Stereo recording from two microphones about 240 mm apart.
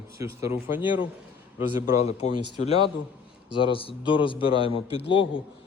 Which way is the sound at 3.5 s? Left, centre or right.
Left.